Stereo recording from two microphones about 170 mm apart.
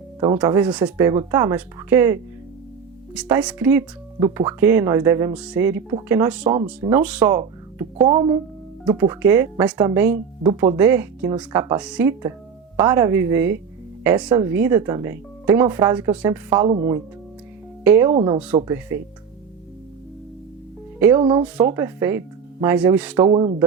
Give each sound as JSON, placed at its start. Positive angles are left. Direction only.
{"t": 0.4, "sound": "speech", "side_deg": -10}
{"t": 1.0, "sound": "speech", "side_deg": -20}
{"t": 5.3, "sound": "speech", "side_deg": -5}
{"t": 6.2, "sound": "speech", "side_deg": -5}
{"t": 8.0, "sound": "speech", "side_deg": -30}
{"t": 10.4, "sound": "speech", "side_deg": -25}
{"t": 10.8, "sound": "speech", "side_deg": -15}
{"t": 16.6, "sound": "speech", "side_deg": -40}
{"t": 17.8, "sound": "speech", "side_deg": -15}
{"t": 18.1, "sound": "speech", "side_deg": -35}
{"t": 18.7, "sound": "speech", "side_deg": -15}
{"t": 21.2, "sound": "speech", "side_deg": -25}
{"t": 23.1, "sound": "speech", "side_deg": -30}